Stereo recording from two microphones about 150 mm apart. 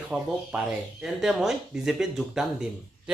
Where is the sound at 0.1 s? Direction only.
5° right (ahead or behind).